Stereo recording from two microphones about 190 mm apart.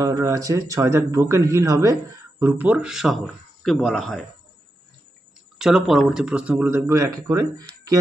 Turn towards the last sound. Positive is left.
turn(degrees=-20)  # may be behind; listen again after turning